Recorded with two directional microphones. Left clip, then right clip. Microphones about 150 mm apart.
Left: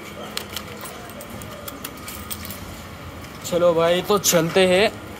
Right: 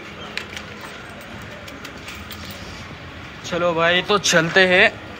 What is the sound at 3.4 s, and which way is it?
Speech, 25° left (ahead or behind).